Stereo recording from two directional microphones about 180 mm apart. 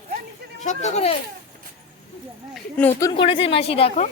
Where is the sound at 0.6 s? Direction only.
40° left (ahead or behind).